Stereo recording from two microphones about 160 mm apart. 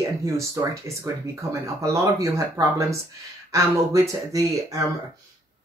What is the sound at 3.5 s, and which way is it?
Speech, 20° right (ahead or behind).